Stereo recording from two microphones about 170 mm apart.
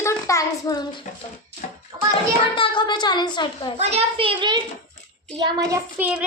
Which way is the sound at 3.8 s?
40° right (ahead or behind).